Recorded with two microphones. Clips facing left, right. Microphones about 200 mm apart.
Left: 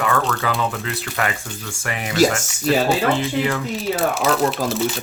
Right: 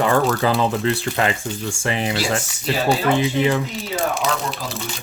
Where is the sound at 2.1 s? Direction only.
45° left (ahead or behind).